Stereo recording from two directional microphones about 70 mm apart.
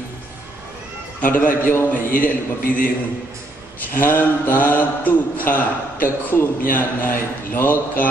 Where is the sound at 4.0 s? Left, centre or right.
Left.